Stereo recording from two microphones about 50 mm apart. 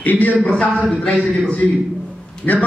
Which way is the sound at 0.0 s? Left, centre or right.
Left.